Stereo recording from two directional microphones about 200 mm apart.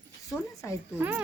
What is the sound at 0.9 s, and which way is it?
Speech, 10° right (ahead or behind).